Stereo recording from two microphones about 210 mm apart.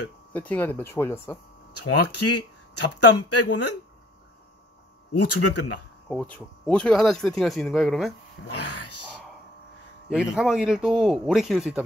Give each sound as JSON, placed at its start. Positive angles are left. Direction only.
{"t": 0.3, "sound": "speech", "side_deg": 10}
{"t": 1.7, "sound": "speech", "side_deg": 90}
{"t": 5.1, "sound": "speech", "side_deg": 90}
{"t": 6.0, "sound": "speech", "side_deg": 5}
{"t": 8.5, "sound": "speech", "side_deg": 90}
{"t": 10.0, "sound": "speech", "side_deg": 0}